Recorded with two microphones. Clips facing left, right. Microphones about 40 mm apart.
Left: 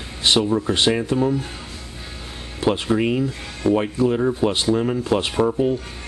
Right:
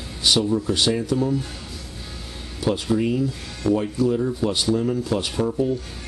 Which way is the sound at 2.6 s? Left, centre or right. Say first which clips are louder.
Left 2 dB; left.